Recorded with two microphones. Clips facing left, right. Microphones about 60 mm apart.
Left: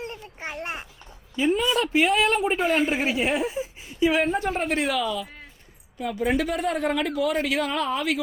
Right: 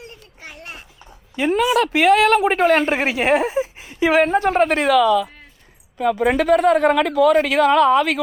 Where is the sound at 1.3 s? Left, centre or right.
Right.